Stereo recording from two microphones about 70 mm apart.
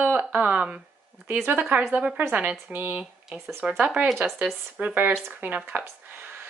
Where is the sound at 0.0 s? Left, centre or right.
Right.